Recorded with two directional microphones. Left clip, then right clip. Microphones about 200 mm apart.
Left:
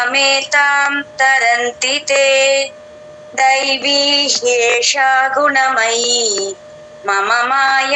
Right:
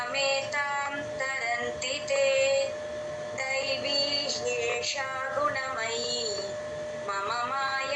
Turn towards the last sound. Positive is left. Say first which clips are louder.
# left 16 dB
turn(degrees=45)  # may be behind; listen again after turning